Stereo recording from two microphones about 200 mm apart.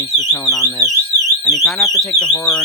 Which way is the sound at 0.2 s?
5° left (ahead or behind).